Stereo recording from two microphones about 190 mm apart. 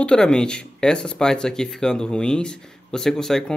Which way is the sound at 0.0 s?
5° left (ahead or behind).